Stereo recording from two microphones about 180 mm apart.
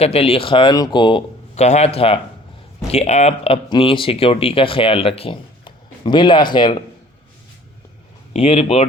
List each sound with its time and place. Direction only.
0.0 s speech: 35° left (ahead or behind)
8.3 s speech: 35° left (ahead or behind)